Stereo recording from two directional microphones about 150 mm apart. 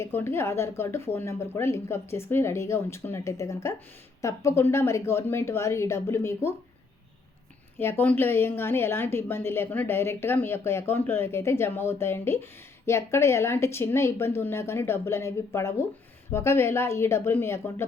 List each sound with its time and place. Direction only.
0.0 s a woman's voice: 15° left (ahead or behind)
7.8 s a woman's voice: 15° left (ahead or behind)